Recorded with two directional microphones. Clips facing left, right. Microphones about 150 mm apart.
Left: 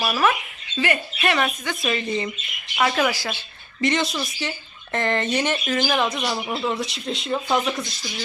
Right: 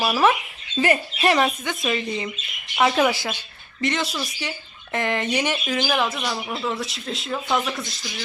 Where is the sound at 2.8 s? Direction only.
15° right (ahead or behind).